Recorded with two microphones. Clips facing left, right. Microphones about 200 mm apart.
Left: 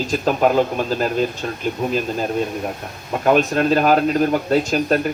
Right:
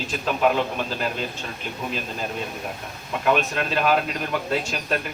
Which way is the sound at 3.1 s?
40° left (ahead or behind).